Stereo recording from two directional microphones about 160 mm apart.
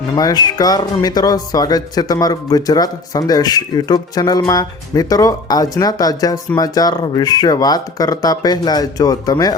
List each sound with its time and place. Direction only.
0.2 s speech: 25° left (ahead or behind)